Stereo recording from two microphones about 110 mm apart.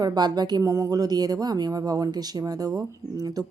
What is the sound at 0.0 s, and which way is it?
Speech, 40° right (ahead or behind).